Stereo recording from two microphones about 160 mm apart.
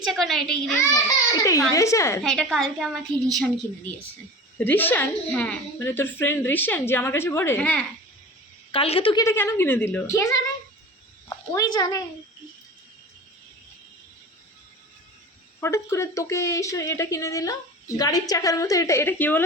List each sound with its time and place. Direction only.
0.0 s a woman's voice: centre (ahead or behind)
1.7 s a woman's voice: 20° left (ahead or behind)
2.2 s a woman's voice: 5° left (ahead or behind)
8.7 s a woman's voice: 35° left (ahead or behind)
9.2 s a woman's voice: 15° left (ahead or behind)
15.6 s a woman's voice: 15° left (ahead or behind)